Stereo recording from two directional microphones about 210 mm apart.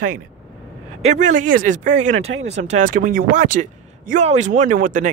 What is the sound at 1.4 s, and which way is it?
Speech, 40° right (ahead or behind).